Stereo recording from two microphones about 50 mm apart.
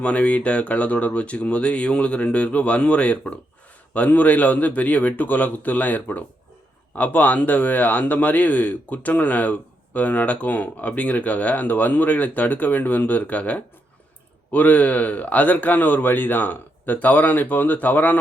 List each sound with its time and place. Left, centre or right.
0.0 s speech: left